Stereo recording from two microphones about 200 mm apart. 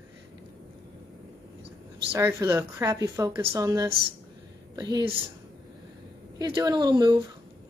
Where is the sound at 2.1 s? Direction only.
10° right (ahead or behind).